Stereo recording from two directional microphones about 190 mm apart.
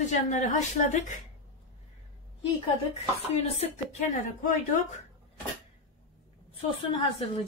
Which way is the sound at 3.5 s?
35° left (ahead or behind).